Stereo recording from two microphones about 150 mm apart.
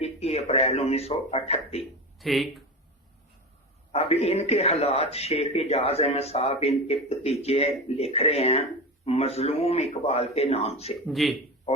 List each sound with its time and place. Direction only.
0.0 s speech: 45° left (ahead or behind)
2.1 s speech: centre (ahead or behind)
3.9 s speech: 40° left (ahead or behind)
11.1 s speech: centre (ahead or behind)